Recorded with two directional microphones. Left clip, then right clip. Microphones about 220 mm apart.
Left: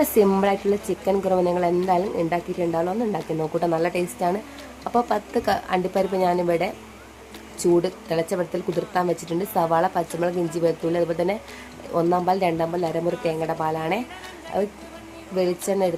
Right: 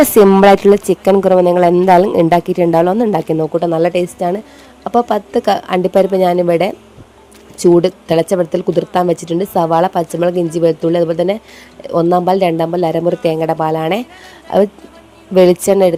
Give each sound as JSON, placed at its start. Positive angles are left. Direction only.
{"t": 0.0, "sound": "speech", "side_deg": -40}
{"t": 3.4, "sound": "speech", "side_deg": -30}